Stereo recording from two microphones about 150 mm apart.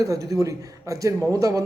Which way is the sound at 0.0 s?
20° right (ahead or behind).